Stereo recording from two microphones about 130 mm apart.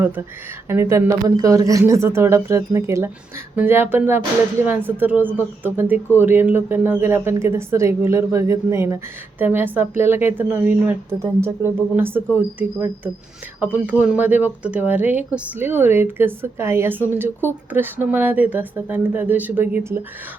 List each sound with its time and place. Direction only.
0.7 s speech: 20° right (ahead or behind)